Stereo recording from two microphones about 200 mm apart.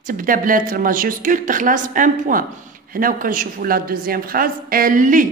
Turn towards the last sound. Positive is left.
turn(degrees=-40)  # may be behind; listen again after turning